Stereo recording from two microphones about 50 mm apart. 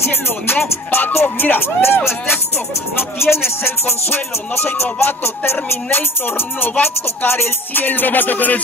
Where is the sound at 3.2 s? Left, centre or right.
Left.